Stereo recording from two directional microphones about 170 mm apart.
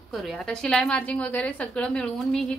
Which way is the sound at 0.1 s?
Centre (ahead or behind).